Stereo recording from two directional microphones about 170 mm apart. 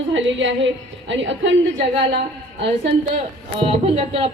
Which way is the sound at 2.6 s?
90° right.